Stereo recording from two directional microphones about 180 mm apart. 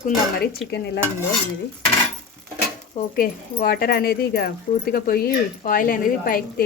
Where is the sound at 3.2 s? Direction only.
55° left (ahead or behind).